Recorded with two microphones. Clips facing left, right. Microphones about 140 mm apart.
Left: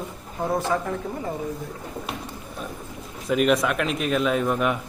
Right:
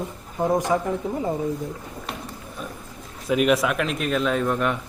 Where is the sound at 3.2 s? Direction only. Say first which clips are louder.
Right 1 dB; centre (ahead or behind).